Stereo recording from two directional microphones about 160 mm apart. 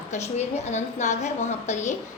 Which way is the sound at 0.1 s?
45° left (ahead or behind).